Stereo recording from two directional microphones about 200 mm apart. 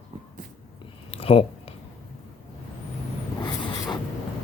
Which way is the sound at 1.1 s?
30° left (ahead or behind).